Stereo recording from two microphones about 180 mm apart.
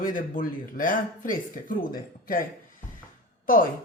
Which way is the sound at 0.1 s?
50° left (ahead or behind).